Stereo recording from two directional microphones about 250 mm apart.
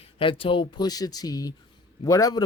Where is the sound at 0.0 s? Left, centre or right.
Left.